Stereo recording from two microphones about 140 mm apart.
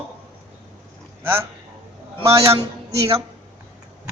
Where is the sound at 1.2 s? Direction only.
15° right (ahead or behind).